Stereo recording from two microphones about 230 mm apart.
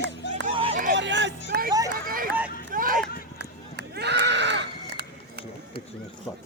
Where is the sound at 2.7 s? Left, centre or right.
Right.